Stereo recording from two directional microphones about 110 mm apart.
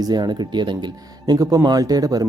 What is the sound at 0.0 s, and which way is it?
Speech, 40° right (ahead or behind).